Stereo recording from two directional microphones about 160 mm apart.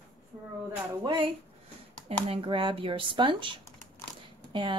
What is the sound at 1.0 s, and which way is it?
Speech, 30° right (ahead or behind).